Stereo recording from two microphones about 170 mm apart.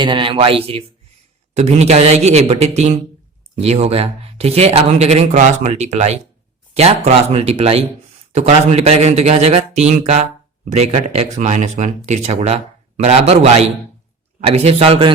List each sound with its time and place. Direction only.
0.0 s speech: 30° right (ahead or behind)